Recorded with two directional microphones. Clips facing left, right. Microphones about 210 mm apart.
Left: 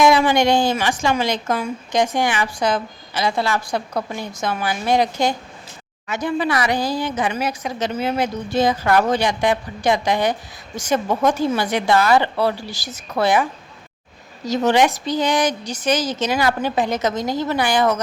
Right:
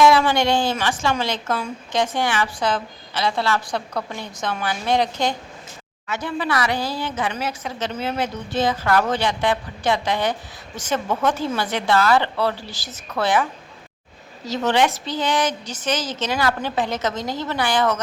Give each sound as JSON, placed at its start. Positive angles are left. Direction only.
{"t": 0.0, "sound": "a woman's voice", "side_deg": 15}
{"t": 14.4, "sound": "a woman's voice", "side_deg": 15}